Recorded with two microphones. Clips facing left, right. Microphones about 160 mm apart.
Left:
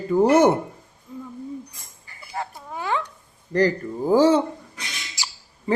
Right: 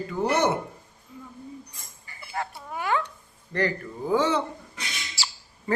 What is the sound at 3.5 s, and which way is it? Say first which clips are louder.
Speech: left 7 dB; 35° left (ahead or behind).